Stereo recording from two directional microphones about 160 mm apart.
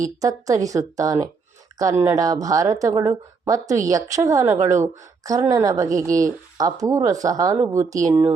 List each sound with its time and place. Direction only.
0.2 s speech: 20° right (ahead or behind)